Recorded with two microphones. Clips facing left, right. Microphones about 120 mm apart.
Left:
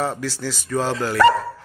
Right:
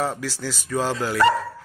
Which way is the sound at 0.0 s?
5° right (ahead or behind).